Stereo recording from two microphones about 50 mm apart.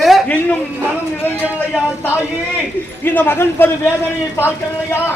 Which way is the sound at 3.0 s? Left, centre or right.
Left.